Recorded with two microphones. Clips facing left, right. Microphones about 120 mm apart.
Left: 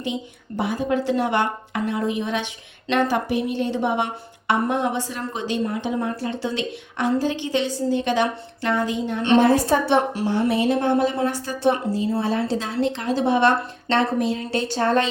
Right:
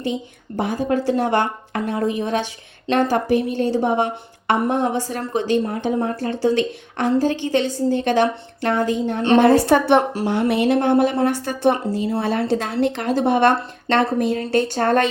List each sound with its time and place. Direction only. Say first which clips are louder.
0.5 s a woman's voice: right 2 dB; 45° right (ahead or behind)
9.4 s speech: right 4 dB; 65° right (ahead or behind)
10.2 s speech: right 2 dB; 70° right (ahead or behind); by 15.0 s 50° right (ahead or behind)